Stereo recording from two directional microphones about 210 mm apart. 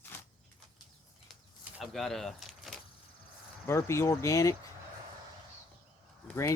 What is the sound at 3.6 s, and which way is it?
Speech, 15° left (ahead or behind).